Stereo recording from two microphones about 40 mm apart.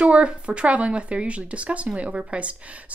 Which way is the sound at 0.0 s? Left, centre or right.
Right.